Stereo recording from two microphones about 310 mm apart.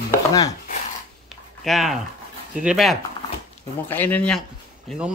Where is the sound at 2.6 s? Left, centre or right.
Centre.